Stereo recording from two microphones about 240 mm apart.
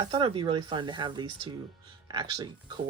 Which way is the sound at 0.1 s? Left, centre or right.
Right.